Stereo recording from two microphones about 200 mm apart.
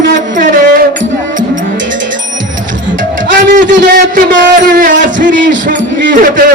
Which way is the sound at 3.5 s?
45° right (ahead or behind).